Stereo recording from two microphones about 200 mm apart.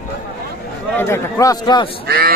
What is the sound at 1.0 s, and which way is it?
Speech, 10° left (ahead or behind).